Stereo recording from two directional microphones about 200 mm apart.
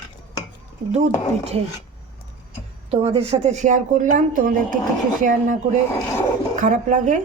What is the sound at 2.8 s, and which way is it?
Speech, 25° right (ahead or behind).